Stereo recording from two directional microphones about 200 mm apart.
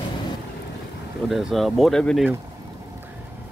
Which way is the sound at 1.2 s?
Centre (ahead or behind).